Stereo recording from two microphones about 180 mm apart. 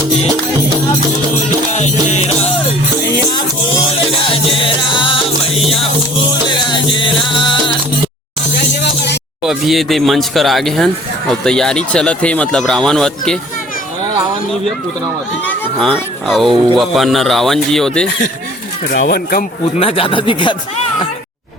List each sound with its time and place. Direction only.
1.7 s music: 40° left (ahead or behind)
4.3 s music: 30° left (ahead or behind)
9.4 s speech: centre (ahead or behind)
15.4 s speech: centre (ahead or behind)
18.9 s speech: 60° left (ahead or behind)
19.8 s speech: 30° left (ahead or behind)